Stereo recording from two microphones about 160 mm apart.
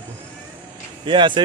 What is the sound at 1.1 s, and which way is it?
Speech, 30° right (ahead or behind).